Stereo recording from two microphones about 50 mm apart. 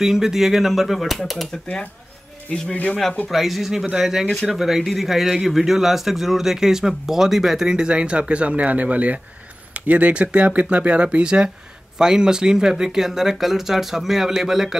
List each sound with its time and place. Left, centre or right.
0.0 s speech: centre
2.7 s speech: left
3.3 s a man's voice: centre